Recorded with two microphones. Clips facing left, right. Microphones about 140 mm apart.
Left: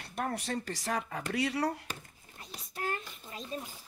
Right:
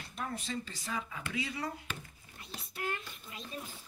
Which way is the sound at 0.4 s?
70° left (ahead or behind).